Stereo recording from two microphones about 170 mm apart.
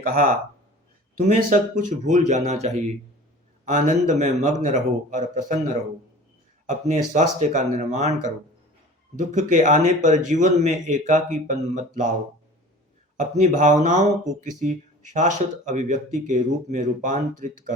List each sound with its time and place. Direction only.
0.0 s a man's voice: 55° right (ahead or behind)
6.7 s a man's voice: 45° right (ahead or behind)
13.1 s a man's voice: 45° right (ahead or behind)